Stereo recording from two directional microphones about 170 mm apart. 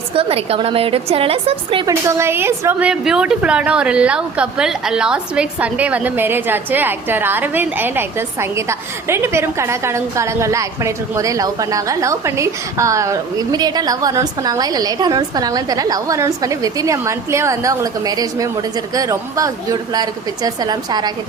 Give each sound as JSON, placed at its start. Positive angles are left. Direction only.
{"t": 0.1, "sound": "a woman's voice", "side_deg": -35}
{"t": 1.9, "sound": "a woman's voice", "side_deg": -15}